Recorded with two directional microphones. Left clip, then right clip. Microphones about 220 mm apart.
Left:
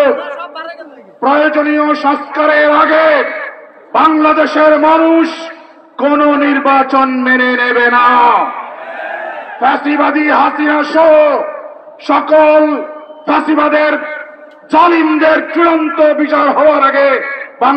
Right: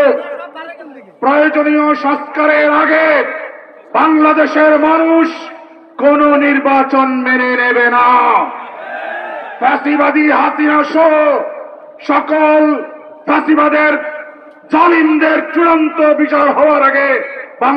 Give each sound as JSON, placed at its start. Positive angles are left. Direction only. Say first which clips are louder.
{"t": 1.2, "sound": "a man's voice", "louder": "even", "side_deg": 15}
{"t": 9.6, "sound": "a man's voice", "louder": "left 1 dB", "side_deg": 15}